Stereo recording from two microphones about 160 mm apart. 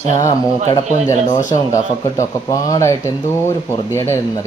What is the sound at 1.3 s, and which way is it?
Speech, 50° left (ahead or behind).